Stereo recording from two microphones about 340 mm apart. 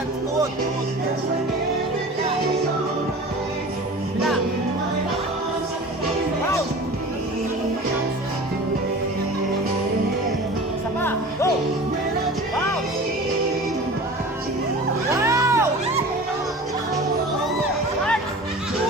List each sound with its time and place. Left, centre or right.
15.1 s music: centre